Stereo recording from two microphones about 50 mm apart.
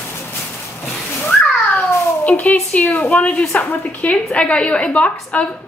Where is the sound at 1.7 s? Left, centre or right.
Left.